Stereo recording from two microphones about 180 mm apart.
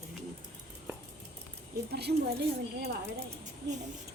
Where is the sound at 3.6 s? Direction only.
70° right (ahead or behind).